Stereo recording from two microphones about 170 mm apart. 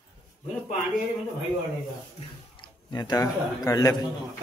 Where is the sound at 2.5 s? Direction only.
25° left (ahead or behind).